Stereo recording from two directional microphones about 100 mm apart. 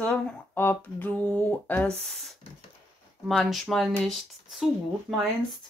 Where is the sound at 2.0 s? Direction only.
Centre (ahead or behind).